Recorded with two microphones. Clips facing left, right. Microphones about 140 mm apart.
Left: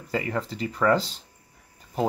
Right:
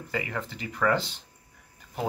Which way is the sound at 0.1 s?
35° left (ahead or behind).